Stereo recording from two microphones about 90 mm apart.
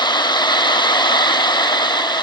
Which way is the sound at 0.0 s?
55° left (ahead or behind).